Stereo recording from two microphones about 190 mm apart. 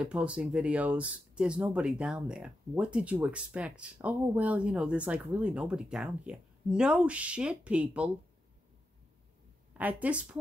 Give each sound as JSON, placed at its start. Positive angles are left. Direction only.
{"t": 0.0, "sound": "speech", "side_deg": -5}
{"t": 9.8, "sound": "speech", "side_deg": -10}